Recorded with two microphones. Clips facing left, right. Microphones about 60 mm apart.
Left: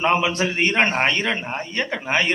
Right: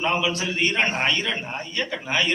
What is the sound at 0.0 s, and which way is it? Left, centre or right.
A man's voice, left.